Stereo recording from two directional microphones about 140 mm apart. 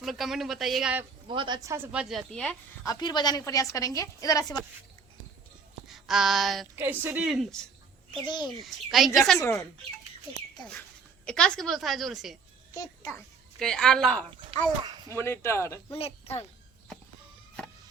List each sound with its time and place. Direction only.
0.0 s a woman's voice: centre (ahead or behind)
1.3 s speech: 35° right (ahead or behind)
1.7 s a woman's voice: 10° right (ahead or behind); by 2.6 s 5° left (ahead or behind)
2.8 s a woman's voice: 30° left (ahead or behind)
5.9 s a sound: centre (ahead or behind)
6.7 s a woman's voice: 15° right (ahead or behind)
7.2 s a woman's voice: 5° right (ahead or behind)
8.2 s a child's voice: 30° left (ahead or behind)
8.6 s a woman's voice: centre (ahead or behind)
11.3 s a woman's voice: 5° left (ahead or behind)
12.7 s a woman's voice: 25° left (ahead or behind)
13.6 s a woman's voice: 5° left (ahead or behind)
15.1 s a woman's voice: 15° left (ahead or behind)
15.9 s speech: 45° left (ahead or behind)